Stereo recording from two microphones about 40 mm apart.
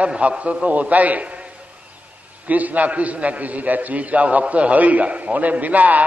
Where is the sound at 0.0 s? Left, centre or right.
Right.